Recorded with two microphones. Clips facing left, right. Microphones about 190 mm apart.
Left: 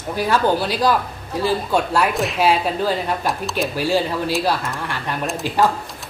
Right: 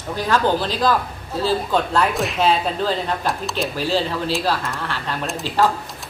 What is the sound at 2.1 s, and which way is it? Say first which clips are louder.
A child's voice: left 1 dB; centre (ahead or behind).